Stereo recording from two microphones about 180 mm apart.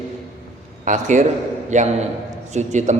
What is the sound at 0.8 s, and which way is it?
A man's voice, 40° right (ahead or behind).